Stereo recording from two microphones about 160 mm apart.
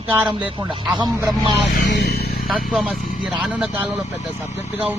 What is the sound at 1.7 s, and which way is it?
Vehicle, 90° left.